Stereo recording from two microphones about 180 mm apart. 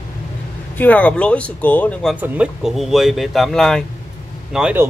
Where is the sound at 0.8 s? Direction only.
10° left (ahead or behind).